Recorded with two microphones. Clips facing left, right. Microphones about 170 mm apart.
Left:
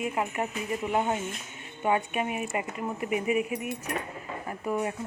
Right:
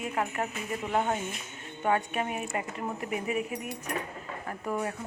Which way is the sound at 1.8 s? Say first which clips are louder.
Left 1 dB; 10° left (ahead or behind).